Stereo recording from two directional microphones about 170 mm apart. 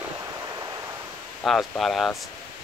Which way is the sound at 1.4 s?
Centre (ahead or behind).